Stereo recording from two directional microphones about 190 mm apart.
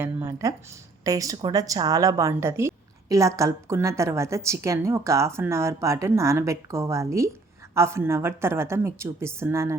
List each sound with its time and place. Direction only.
0.0 s a woman's voice: 10° right (ahead or behind)